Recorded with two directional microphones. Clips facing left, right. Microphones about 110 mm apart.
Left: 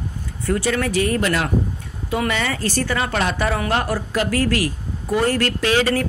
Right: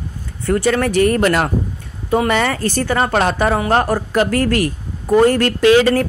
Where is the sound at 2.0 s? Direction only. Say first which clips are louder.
Right 6 dB; 40° right (ahead or behind).